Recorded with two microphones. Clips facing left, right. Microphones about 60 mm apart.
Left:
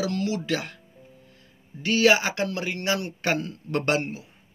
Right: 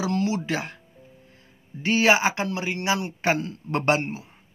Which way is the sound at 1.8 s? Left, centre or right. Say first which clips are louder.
Even; right.